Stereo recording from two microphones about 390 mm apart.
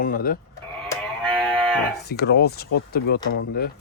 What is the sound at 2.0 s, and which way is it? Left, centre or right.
Speech, left.